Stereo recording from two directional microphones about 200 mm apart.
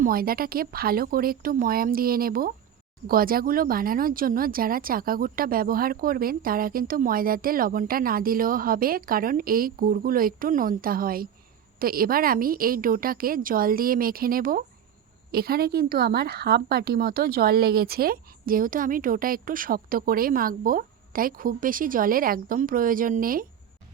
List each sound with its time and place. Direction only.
0.0 s speech: 45° right (ahead or behind)